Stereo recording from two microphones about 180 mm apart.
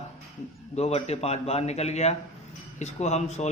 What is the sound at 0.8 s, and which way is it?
A man's voice, 35° left (ahead or behind).